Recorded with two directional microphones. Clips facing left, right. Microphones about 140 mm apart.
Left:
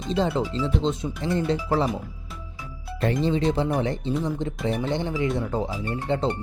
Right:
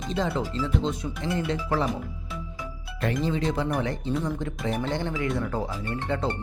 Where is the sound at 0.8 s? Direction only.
30° left (ahead or behind).